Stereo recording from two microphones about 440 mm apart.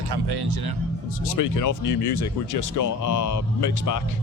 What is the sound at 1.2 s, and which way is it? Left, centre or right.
Speech, left.